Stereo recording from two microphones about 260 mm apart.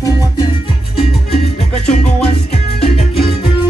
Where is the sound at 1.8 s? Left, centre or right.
Left.